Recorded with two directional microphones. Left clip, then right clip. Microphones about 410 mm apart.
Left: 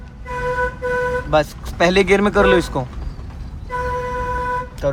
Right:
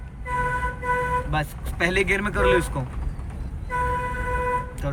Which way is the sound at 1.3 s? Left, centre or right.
Centre.